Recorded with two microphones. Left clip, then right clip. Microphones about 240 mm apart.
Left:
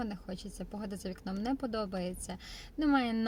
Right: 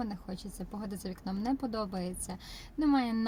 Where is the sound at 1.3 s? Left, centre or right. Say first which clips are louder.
Right 1 dB; right.